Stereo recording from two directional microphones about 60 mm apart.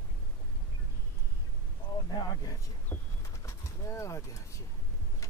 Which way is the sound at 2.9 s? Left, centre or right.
Left.